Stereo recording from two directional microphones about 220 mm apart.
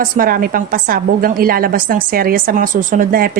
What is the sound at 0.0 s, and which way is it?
A woman's voice, 40° right (ahead or behind).